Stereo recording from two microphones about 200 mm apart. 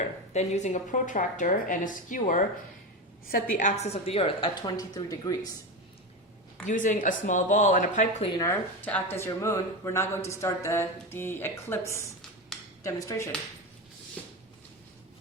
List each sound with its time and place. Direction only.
0.0 s a woman's voice: 35° left (ahead or behind); by 5.4 s 20° left (ahead or behind)
6.7 s a woman's voice: 40° left (ahead or behind)
8.4 s speech: 10° left (ahead or behind)
14.2 s a sound: 5° left (ahead or behind)